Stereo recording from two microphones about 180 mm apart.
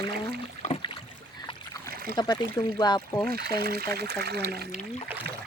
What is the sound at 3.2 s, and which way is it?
Speech, 60° right (ahead or behind).